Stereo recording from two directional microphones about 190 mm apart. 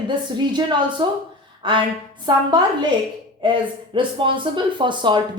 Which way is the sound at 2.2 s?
25° right (ahead or behind).